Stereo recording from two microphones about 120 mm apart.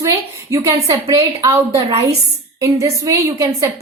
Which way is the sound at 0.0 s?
25° right (ahead or behind).